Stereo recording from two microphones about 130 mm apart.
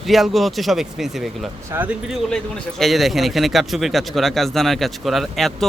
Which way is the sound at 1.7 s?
20° right (ahead or behind).